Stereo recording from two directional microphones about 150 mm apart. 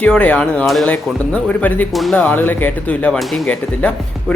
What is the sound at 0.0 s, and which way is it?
Speech, 10° left (ahead or behind).